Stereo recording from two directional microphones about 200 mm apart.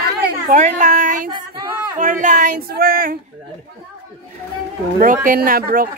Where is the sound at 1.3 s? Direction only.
20° right (ahead or behind).